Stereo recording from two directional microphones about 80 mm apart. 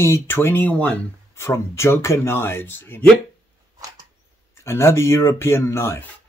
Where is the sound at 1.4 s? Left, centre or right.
Left.